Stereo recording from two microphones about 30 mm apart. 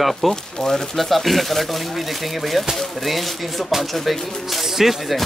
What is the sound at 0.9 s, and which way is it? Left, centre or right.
Speech, centre.